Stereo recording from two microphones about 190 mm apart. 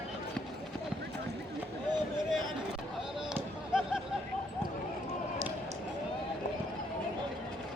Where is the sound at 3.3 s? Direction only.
5° right (ahead or behind).